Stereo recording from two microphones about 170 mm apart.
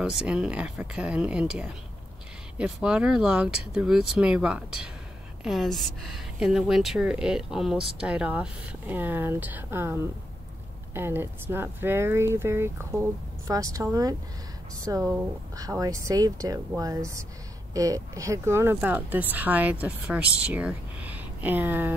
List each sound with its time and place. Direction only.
0.2 s a woman's voice: 5° right (ahead or behind)
15.1 s speech: 20° right (ahead or behind)